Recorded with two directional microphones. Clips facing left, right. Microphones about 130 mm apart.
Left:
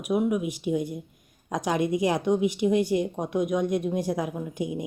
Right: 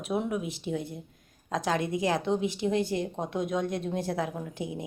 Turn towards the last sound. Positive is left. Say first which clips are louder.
# left 5 dB
turn(degrees=15)  # may be behind; listen again after turning